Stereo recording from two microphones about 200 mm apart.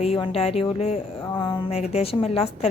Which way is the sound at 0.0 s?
30° left (ahead or behind).